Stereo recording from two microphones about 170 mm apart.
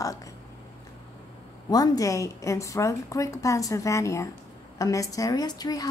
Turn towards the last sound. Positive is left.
turn(degrees=20)  # may be behind; listen again after turning